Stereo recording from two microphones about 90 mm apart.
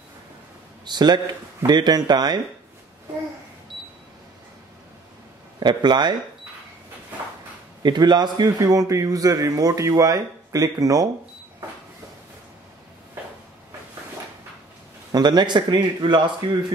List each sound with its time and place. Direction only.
0.8 s speech: 50° right (ahead or behind)
5.6 s speech: 55° right (ahead or behind)
7.8 s a man's voice: 50° right (ahead or behind)
15.1 s speech: 55° right (ahead or behind)